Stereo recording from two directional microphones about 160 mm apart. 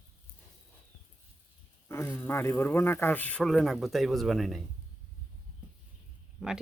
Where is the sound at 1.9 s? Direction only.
15° left (ahead or behind).